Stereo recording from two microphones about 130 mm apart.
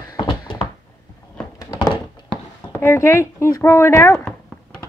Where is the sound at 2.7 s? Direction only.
20° left (ahead or behind).